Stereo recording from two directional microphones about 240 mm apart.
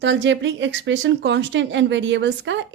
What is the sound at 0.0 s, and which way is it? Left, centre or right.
Speech, right.